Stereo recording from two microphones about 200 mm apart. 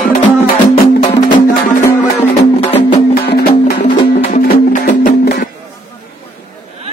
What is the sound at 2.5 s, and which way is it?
Music, 30° left (ahead or behind).